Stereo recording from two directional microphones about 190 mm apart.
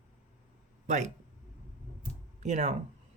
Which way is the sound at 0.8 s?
40° right (ahead or behind).